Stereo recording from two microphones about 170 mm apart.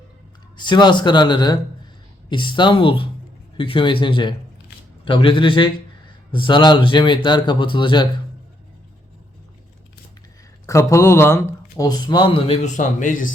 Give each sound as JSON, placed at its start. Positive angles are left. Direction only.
{"t": 0.5, "sound": "speech", "side_deg": 25}
{"t": 10.7, "sound": "speech", "side_deg": 15}
{"t": 12.6, "sound": "speech", "side_deg": 45}